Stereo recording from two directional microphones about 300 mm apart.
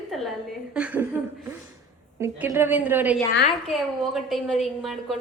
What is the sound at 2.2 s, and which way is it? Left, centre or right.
A woman's voice, centre.